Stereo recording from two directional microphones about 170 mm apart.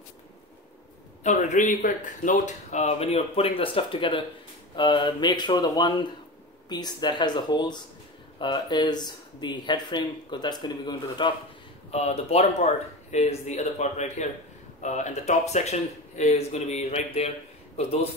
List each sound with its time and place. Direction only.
1.2 s speech: 45° left (ahead or behind); by 11.3 s 25° left (ahead or behind)
11.9 s speech: 40° left (ahead or behind)